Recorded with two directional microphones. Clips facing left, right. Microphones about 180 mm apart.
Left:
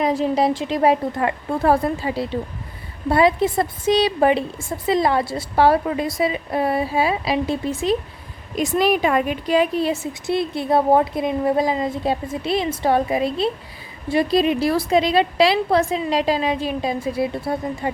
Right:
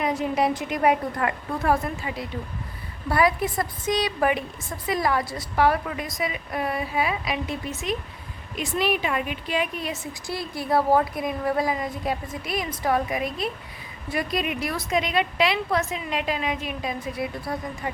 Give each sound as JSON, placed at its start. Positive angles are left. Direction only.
{"t": 0.0, "sound": "a woman's voice", "side_deg": 35}